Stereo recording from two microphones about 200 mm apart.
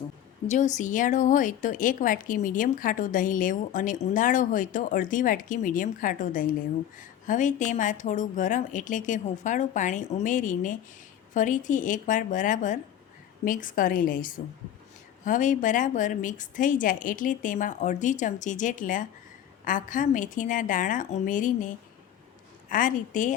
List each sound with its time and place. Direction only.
0.4 s a woman's voice: 35° left (ahead or behind)
22.7 s speech: 40° left (ahead or behind)